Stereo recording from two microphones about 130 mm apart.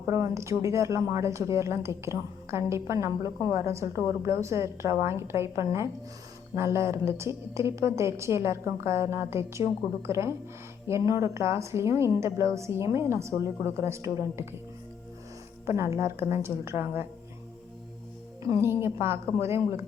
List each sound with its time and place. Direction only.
0.1 s a woman's voice: 25° right (ahead or behind)
15.6 s a woman's voice: 20° right (ahead or behind)
18.4 s a woman's voice: 20° right (ahead or behind)